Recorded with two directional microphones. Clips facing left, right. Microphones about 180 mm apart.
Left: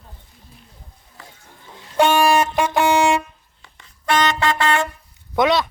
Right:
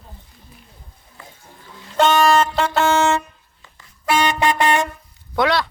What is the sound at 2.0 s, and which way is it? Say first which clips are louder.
Music: even; 10° left (ahead or behind).